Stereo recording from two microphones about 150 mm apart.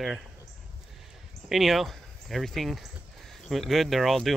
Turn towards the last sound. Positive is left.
turn(degrees=0)  # may be behind; listen again after turning